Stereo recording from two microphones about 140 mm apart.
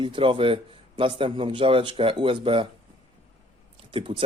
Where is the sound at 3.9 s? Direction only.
40° right (ahead or behind).